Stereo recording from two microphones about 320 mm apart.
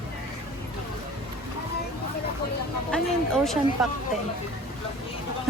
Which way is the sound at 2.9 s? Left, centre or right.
Centre.